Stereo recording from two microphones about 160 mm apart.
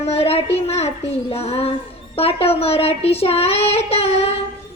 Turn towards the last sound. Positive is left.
turn(degrees=40)  # may be behind; listen again after turning